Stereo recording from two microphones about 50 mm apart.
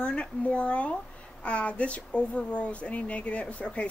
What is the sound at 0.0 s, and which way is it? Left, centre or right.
Speech, left.